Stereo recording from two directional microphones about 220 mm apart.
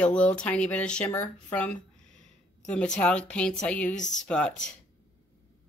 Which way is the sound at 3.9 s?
35° left (ahead or behind).